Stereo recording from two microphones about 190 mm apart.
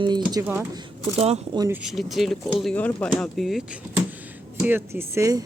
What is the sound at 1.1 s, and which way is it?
Speech, 35° right (ahead or behind).